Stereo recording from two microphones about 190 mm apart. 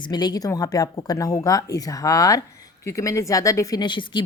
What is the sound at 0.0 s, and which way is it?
A woman's voice, 20° left (ahead or behind).